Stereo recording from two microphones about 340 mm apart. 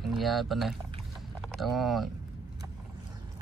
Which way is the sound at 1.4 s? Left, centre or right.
Centre.